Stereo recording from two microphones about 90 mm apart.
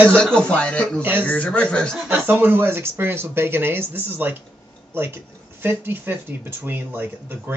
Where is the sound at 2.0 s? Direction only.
20° right (ahead or behind).